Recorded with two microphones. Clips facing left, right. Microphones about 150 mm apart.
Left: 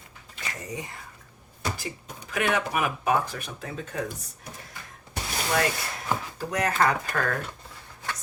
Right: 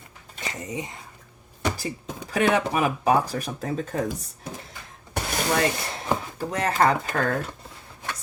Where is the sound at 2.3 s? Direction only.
35° right (ahead or behind).